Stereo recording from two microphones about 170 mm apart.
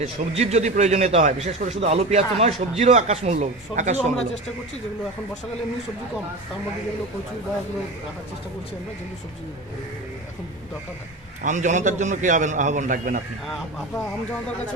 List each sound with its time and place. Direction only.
0.0 s speech: 40° right (ahead or behind)
11.4 s a man's voice: 45° right (ahead or behind)